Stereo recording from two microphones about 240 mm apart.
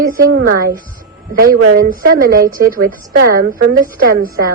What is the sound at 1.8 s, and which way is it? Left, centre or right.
A woman's voice, right.